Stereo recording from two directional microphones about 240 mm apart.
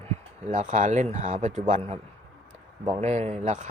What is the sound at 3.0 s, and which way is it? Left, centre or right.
Speech, right.